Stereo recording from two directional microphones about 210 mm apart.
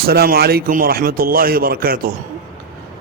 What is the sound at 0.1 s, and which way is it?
A man's voice, 45° right (ahead or behind).